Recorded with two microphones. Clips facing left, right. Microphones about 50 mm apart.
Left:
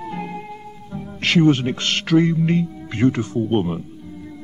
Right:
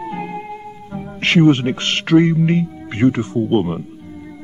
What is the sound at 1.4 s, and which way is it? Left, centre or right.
A man's voice, centre.